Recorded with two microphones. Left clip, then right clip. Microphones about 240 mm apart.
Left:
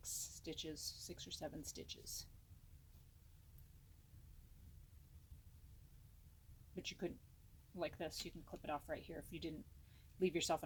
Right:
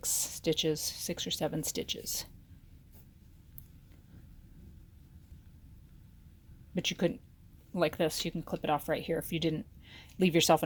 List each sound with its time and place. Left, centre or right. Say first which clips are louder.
0.0 s speech: right 17 dB; right
6.7 s speech: right 16 dB; right